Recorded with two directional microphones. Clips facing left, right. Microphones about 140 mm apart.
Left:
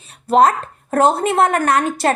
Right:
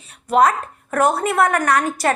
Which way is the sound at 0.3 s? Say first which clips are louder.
Left 2 dB; 30° left (ahead or behind).